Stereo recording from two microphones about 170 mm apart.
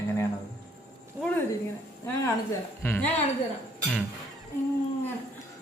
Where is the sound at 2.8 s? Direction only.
15° left (ahead or behind).